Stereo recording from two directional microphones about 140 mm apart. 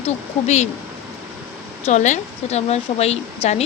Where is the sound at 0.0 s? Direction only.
50° left (ahead or behind).